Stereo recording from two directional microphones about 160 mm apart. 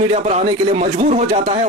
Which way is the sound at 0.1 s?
45° right (ahead or behind).